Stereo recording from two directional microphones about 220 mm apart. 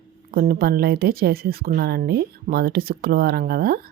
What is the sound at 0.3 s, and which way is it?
Speech, 40° right (ahead or behind).